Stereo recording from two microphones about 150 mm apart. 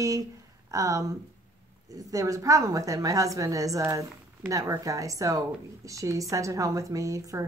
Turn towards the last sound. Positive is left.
turn(degrees=-20)  # may be behind; listen again after turning